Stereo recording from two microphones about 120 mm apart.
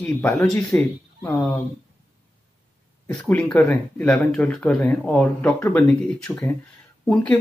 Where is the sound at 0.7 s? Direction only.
25° left (ahead or behind).